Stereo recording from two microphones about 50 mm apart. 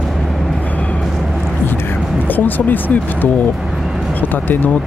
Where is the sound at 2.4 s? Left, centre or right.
Left.